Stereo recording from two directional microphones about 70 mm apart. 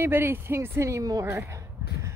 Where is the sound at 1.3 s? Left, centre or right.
Right.